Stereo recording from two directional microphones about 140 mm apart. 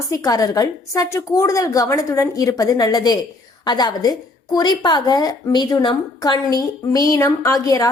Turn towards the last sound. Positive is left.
turn(degrees=25)  # may be behind; listen again after turning